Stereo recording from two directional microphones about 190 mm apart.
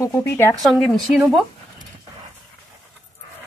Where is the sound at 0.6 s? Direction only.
Centre (ahead or behind).